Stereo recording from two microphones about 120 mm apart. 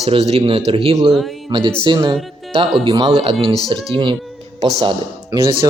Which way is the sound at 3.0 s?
50° right (ahead or behind).